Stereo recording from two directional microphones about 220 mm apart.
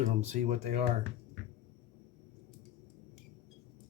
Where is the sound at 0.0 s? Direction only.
30° right (ahead or behind).